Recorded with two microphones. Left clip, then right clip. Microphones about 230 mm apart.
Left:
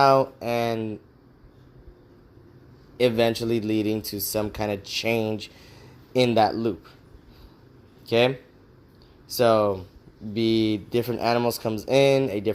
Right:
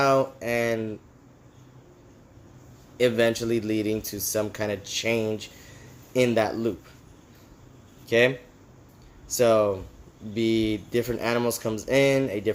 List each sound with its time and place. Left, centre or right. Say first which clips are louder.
0.0 s speech: left 3 dB; left
3.0 s speech: left 1 dB; left
9.3 s speech: left 1 dB; left